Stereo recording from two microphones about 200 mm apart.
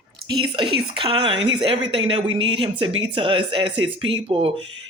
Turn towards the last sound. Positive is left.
turn(degrees=-25)  # may be behind; listen again after turning